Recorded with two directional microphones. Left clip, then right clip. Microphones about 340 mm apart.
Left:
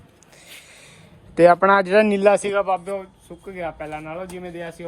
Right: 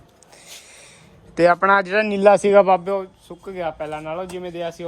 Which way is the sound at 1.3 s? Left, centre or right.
Centre.